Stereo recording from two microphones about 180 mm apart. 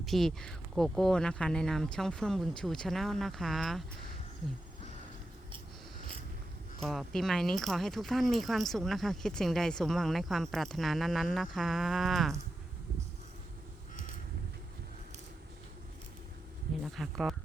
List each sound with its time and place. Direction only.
0.0 s speech: centre (ahead or behind)
6.8 s speech: centre (ahead or behind)
16.8 s speech: centre (ahead or behind)